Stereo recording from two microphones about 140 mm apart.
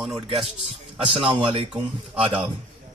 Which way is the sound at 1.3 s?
40° right (ahead or behind).